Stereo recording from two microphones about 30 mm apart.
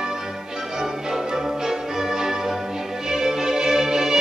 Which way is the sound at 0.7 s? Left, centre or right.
Centre.